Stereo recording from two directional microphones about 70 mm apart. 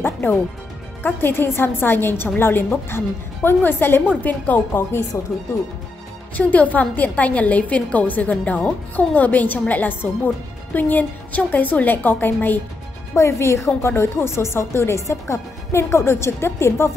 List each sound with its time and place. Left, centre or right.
0.0 s music: left
1.0 s a woman's voice: left
5.1 s speech: left
6.3 s a woman's voice: left
13.1 s speech: left